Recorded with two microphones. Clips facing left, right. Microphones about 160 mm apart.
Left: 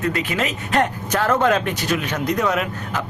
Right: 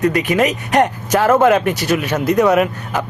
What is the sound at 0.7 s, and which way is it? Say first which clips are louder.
Speech: right 4 dB; 10° right (ahead or behind).